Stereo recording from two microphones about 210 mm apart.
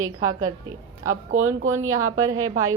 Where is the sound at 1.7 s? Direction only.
15° right (ahead or behind).